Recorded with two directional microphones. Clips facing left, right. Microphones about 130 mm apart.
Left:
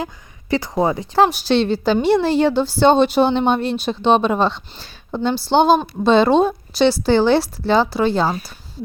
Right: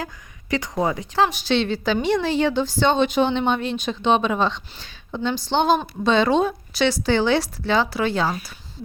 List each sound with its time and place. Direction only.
0.5 s a woman's voice: 30° left (ahead or behind)
5.7 s a woman's voice: 25° left (ahead or behind)